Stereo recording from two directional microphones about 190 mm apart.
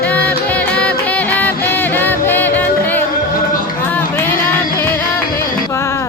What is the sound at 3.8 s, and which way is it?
Run, 10° left (ahead or behind).